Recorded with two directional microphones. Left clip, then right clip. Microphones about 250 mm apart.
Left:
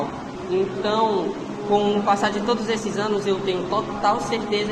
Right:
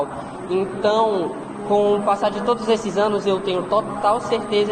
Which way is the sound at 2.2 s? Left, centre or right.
Right.